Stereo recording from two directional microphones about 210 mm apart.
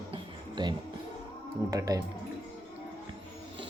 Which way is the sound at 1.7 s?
15° right (ahead or behind).